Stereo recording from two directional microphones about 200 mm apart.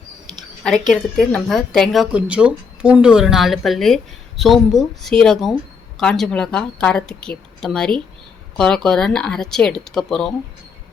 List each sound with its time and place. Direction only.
0.6 s a woman's voice: centre (ahead or behind)